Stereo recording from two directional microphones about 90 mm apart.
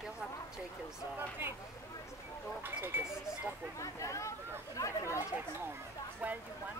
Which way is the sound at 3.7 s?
35° left (ahead or behind).